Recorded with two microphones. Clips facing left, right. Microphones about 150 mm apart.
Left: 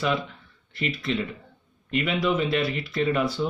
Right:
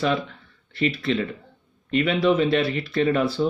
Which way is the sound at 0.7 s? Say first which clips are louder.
Right 4 dB; 35° right (ahead or behind).